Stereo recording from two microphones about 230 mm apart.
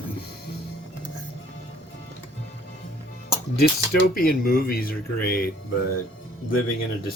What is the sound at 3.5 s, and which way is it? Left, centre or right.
Speech, left.